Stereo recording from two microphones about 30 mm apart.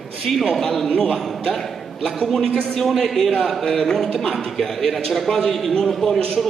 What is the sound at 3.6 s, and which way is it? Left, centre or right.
Speech, centre.